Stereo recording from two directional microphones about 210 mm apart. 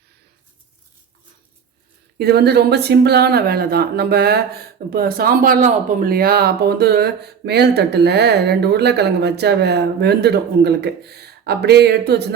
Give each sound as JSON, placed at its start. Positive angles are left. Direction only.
{"t": 2.1, "sound": "speech", "side_deg": -50}